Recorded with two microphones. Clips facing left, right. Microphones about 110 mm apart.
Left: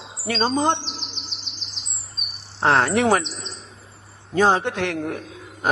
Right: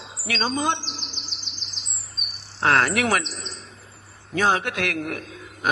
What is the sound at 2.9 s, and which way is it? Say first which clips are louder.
Speech: left 4 dB; 30° left (ahead or behind).